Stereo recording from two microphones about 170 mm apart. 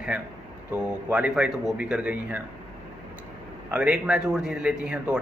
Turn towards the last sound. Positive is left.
turn(degrees=-5)  # may be behind; listen again after turning